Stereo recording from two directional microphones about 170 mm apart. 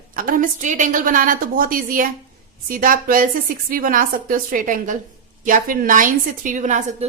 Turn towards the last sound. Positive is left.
turn(degrees=-45)  # may be behind; listen again after turning